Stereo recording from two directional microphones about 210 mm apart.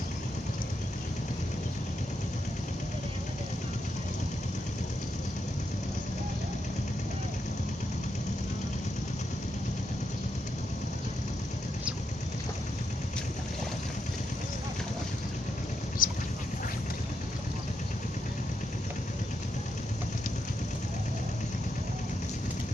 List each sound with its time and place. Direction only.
16.0 s boat: 40° left (ahead or behind)